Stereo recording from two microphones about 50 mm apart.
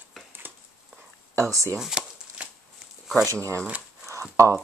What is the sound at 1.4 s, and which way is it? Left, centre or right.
Speech, right.